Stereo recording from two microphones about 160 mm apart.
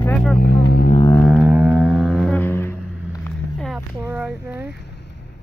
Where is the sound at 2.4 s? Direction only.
15° left (ahead or behind).